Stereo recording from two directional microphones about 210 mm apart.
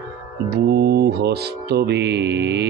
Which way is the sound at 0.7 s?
50° right (ahead or behind).